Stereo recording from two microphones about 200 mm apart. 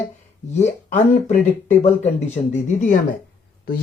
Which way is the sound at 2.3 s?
35° left (ahead or behind).